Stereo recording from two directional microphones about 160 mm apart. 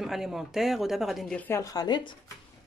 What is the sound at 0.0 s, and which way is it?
Speech, centre (ahead or behind).